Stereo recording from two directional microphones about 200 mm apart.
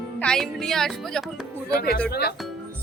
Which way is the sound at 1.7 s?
50° left (ahead or behind).